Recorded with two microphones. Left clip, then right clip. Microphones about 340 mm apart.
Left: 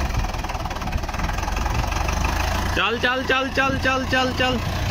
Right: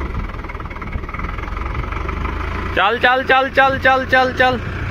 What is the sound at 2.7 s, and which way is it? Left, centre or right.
Speech, centre.